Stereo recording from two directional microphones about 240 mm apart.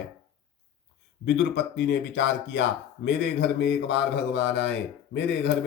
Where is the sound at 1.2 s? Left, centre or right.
Left.